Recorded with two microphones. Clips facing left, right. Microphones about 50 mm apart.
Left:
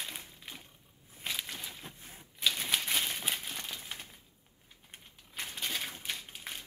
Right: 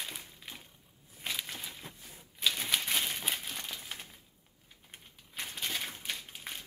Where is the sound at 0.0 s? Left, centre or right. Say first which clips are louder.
Even; centre.